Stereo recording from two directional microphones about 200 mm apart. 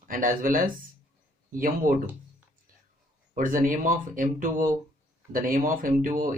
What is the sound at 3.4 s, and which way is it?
A man's voice, 40° right (ahead or behind).